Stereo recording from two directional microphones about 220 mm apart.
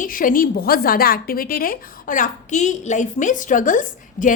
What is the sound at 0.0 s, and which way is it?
A woman's voice, 40° left (ahead or behind).